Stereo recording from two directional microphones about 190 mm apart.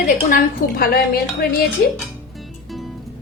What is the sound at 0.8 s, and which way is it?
Speech, 55° left (ahead or behind).